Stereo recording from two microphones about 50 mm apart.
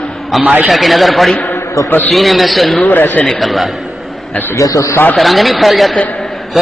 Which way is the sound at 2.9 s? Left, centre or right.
Left.